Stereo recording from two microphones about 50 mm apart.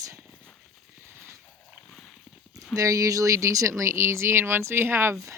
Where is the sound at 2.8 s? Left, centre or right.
Right.